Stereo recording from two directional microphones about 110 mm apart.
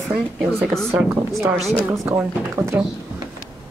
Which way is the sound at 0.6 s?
5° left (ahead or behind).